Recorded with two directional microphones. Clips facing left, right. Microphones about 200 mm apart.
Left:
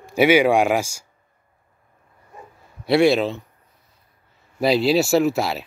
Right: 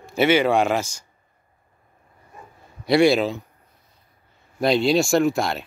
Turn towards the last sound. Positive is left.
turn(degrees=5)  # may be behind; listen again after turning